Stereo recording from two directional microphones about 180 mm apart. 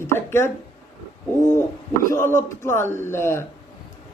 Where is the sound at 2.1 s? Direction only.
15° left (ahead or behind).